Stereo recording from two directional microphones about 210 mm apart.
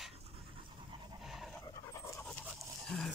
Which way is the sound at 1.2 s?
Centre (ahead or behind).